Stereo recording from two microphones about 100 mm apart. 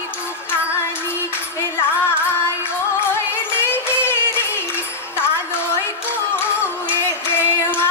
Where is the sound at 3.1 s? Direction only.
20° left (ahead or behind).